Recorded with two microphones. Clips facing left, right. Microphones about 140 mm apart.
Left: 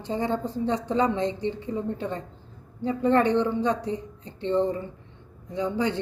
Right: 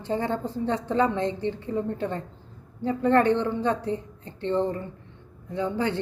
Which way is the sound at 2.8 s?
20° left (ahead or behind).